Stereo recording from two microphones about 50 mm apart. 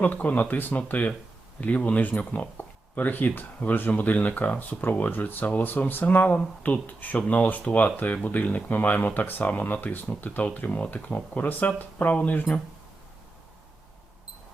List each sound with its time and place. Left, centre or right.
0.0 s speech: left